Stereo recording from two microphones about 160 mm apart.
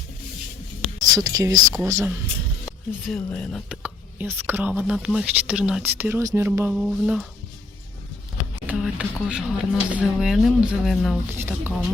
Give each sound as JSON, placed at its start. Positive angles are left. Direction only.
{"t": 1.1, "sound": "speech", "side_deg": -20}
{"t": 3.1, "sound": "speech", "side_deg": 5}
{"t": 3.7, "sound": "speech", "side_deg": -10}
{"t": 6.7, "sound": "speech", "side_deg": -5}
{"t": 8.6, "sound": "speech", "side_deg": -10}
{"t": 11.3, "sound": "speech", "side_deg": -10}